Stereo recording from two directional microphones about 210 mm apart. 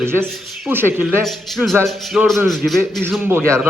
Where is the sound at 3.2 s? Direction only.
10° right (ahead or behind).